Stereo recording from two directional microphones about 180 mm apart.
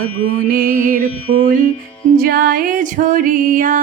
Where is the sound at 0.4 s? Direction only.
50° right (ahead or behind).